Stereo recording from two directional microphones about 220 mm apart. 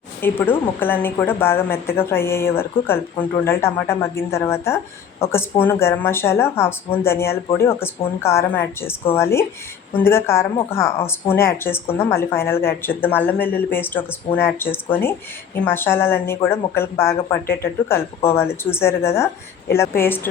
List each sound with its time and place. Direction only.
0.2 s speech: 10° left (ahead or behind)
17.4 s speech: 40° left (ahead or behind)
17.8 s speech: 10° left (ahead or behind)